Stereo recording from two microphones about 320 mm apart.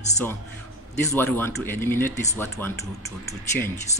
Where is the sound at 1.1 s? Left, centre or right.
Centre.